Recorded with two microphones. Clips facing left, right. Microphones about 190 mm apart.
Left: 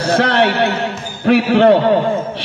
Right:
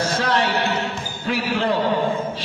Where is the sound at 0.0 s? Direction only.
65° left (ahead or behind).